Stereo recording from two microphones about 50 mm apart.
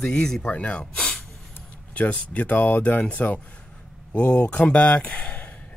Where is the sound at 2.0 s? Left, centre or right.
Left.